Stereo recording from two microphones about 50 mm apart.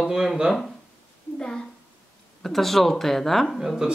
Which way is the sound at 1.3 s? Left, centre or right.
Centre.